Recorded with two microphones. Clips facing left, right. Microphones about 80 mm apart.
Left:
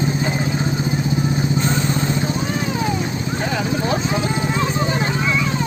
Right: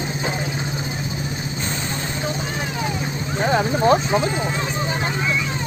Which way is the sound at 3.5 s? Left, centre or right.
Right.